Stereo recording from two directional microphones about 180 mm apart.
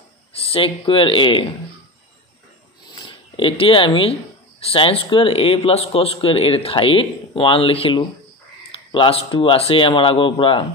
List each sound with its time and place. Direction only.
0.3 s speech: 30° left (ahead or behind)
2.9 s speech: 30° left (ahead or behind)